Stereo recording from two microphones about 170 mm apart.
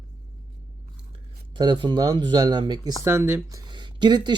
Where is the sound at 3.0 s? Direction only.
15° right (ahead or behind).